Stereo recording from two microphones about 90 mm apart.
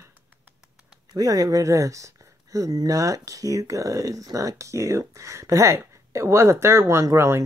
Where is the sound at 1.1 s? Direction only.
45° right (ahead or behind).